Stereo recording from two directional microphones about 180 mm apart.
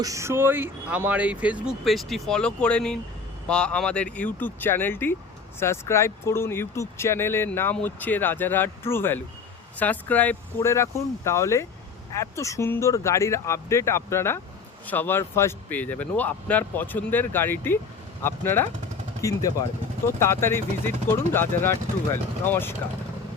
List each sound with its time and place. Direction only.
0.0 s speech: 15° right (ahead or behind); by 22.7 s 10° left (ahead or behind)